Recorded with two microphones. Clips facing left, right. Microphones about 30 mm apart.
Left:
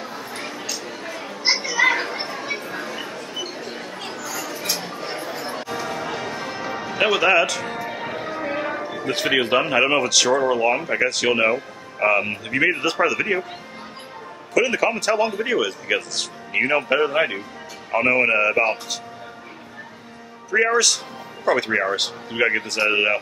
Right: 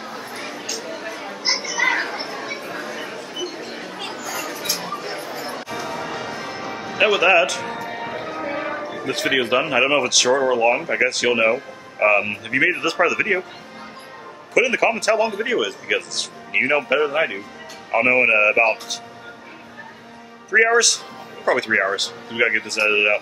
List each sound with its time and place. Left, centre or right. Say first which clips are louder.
0.3 s chatter: even; centre
1.4 s a sound: left 3 dB; left
1.9 s chatter: even; centre
2.6 s bow-wow: even; centre
3.0 s dog: right 1 dB; centre
4.6 s a sound: even; centre
5.1 s change ringing: even; centre
7.9 s music: even; centre
8.9 s speech: even; centre
14.5 s speech: right 2 dB; centre
17.9 s speech: right 2 dB; centre
20.5 s speech: right 3 dB; centre